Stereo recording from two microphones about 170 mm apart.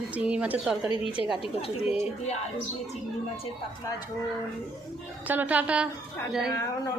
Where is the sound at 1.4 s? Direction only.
35° left (ahead or behind).